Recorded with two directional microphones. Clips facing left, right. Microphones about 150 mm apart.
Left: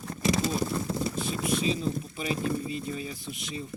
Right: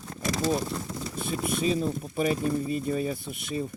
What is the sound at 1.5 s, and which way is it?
Speech, 50° right (ahead or behind).